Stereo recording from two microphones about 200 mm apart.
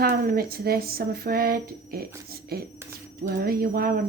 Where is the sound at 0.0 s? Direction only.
50° right (ahead or behind).